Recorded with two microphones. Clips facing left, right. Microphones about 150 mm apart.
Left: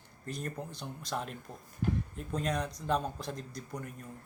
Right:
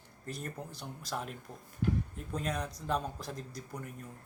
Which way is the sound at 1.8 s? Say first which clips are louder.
Right 1 dB; 40° left (ahead or behind).